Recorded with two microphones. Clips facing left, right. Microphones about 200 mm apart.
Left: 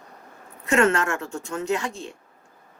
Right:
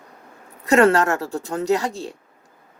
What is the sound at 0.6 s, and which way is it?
Speech, 35° right (ahead or behind).